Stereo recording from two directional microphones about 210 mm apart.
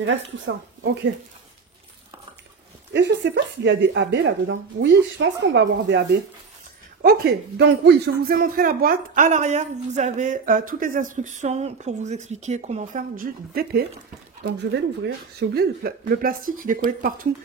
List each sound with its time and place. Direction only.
0.0 s a woman's voice: 60° right (ahead or behind)
2.9 s a woman's voice: 55° right (ahead or behind)
7.0 s speech: 45° right (ahead or behind)